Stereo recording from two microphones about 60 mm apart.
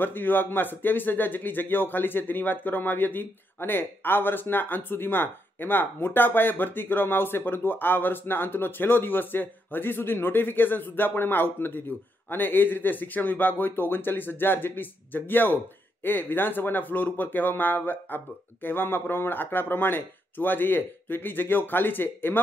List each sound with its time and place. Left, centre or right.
0.0 s speech: left